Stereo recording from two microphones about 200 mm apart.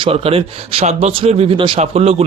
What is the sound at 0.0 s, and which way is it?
Speech, 30° right (ahead or behind).